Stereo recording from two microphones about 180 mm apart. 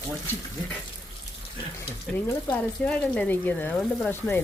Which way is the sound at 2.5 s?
5° left (ahead or behind).